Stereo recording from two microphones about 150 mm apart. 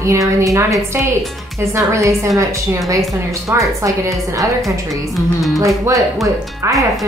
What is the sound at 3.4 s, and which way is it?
Speech, 20° right (ahead or behind).